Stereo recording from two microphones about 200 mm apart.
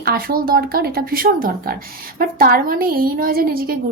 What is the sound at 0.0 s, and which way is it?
Speech, 50° right (ahead or behind).